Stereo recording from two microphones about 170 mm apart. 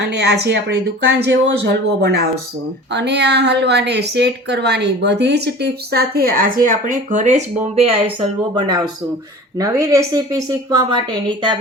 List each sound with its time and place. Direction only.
0.0 s speech: 85° right
2.9 s speech: 90° right; by 7.4 s 45° right (ahead or behind)
7.9 s speech: 35° right (ahead or behind)
9.6 s a woman's voice: 20° right (ahead or behind)